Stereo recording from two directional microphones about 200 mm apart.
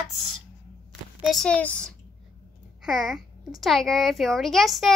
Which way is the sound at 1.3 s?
5° left (ahead or behind).